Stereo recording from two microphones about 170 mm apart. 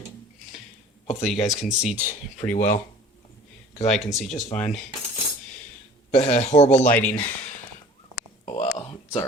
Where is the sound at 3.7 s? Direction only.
40° left (ahead or behind).